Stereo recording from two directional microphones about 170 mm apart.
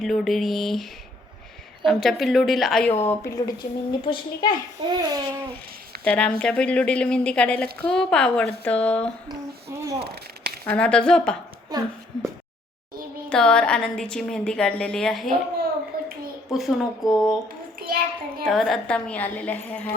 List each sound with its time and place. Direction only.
0.0 s a woman's voice: centre (ahead or behind)
2.9 s speech: 15° left (ahead or behind)
4.9 s a sound: 25° right (ahead or behind)
6.1 s a woman's voice: 5° left (ahead or behind)
10.0 s a sound: 70° right (ahead or behind)
10.7 s a woman's voice: 5° left (ahead or behind)
13.3 s a woman's voice: 5° left (ahead or behind)
15.9 s a sound: 60° right (ahead or behind)
16.5 s a woman's voice: centre (ahead or behind)
17.7 s a child's voice: 60° right (ahead or behind)
18.4 s a woman's voice: centre (ahead or behind)